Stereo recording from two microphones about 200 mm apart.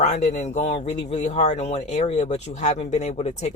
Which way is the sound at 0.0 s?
35° left (ahead or behind).